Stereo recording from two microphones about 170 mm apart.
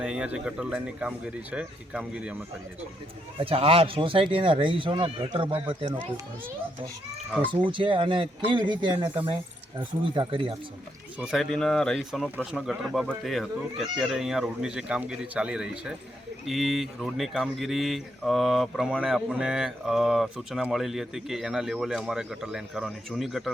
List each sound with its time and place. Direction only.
0.0 s speech: 5° right (ahead or behind)
3.3 s a man's voice: 35° right (ahead or behind)
7.4 s a man's voice: 30° right (ahead or behind)
11.2 s speech: centre (ahead or behind)